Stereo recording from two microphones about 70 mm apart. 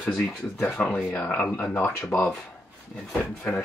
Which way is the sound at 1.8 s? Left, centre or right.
Left.